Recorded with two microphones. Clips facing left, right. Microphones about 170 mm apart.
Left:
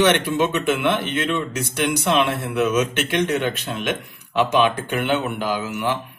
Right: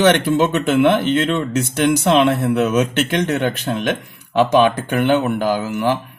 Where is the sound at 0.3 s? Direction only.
45° right (ahead or behind).